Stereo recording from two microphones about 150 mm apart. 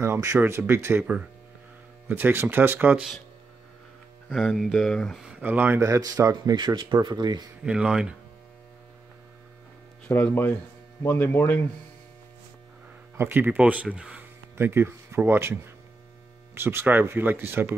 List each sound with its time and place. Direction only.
0.0 s speech: 20° right (ahead or behind)
4.3 s speech: centre (ahead or behind); by 7.4 s 30° right (ahead or behind)
7.6 s speech: 5° right (ahead or behind)
10.0 s speech: 15° left (ahead or behind)
13.2 s speech: 15° right (ahead or behind)